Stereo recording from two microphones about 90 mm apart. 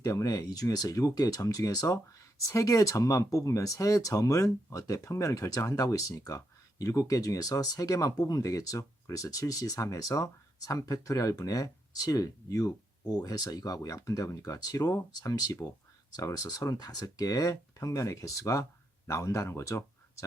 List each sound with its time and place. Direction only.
0.0 s speech: 35° left (ahead or behind)